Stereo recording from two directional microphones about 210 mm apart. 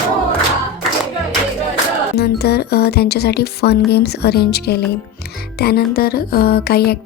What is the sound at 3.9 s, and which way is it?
Speech, 50° left (ahead or behind).